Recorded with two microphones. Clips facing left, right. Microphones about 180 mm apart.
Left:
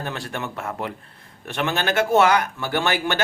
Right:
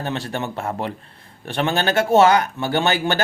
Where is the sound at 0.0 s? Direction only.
25° right (ahead or behind).